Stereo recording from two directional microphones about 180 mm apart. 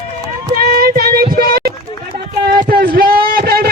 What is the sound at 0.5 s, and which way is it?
Music, 60° right (ahead or behind).